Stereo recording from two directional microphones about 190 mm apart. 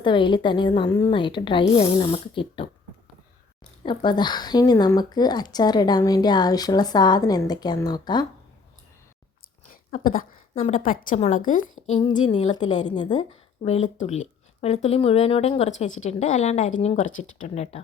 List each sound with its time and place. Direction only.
0.0 s a woman's voice: 25° left (ahead or behind)
3.8 s a woman's voice: 25° left (ahead or behind)
9.9 s a woman's voice: 45° left (ahead or behind)
13.0 s a woman's voice: 25° left (ahead or behind)
13.6 s speech: 35° left (ahead or behind)
17.1 s speech: 90° left
17.3 s speech: 35° left (ahead or behind)